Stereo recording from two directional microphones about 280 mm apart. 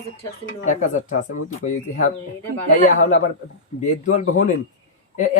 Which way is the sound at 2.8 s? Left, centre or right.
Left.